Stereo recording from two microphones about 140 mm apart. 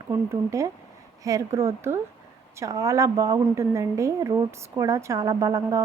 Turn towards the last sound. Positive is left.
turn(degrees=-25)  # may be behind; listen again after turning